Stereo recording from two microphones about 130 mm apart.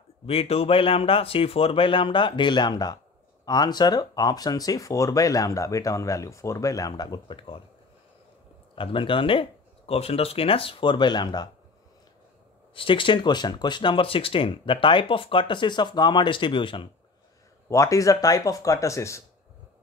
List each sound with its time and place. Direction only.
0.3 s speech: 50° left (ahead or behind)
8.7 s speech: 40° left (ahead or behind)
12.7 s speech: 40° left (ahead or behind)
17.6 s speech: 25° left (ahead or behind)